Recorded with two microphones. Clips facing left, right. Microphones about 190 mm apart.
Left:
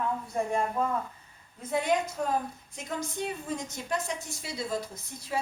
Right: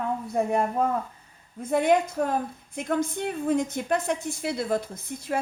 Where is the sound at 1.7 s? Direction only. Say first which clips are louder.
Right 6 dB; 55° right (ahead or behind).